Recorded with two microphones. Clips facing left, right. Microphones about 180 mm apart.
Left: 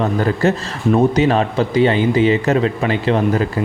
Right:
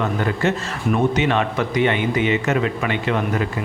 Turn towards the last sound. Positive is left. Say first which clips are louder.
# left 5 dB
turn(degrees=35)  # may be behind; listen again after turning